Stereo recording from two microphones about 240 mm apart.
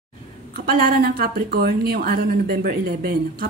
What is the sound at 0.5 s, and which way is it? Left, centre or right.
A woman's voice, right.